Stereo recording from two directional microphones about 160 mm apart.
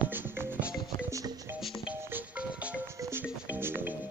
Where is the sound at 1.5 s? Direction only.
5° right (ahead or behind).